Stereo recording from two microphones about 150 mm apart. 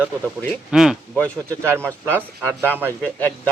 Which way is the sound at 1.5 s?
15° right (ahead or behind).